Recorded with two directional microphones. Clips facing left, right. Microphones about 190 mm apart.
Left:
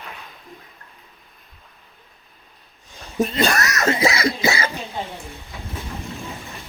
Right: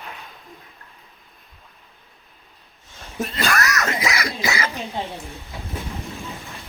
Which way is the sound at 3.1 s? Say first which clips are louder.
Left 4 dB; 15° left (ahead or behind).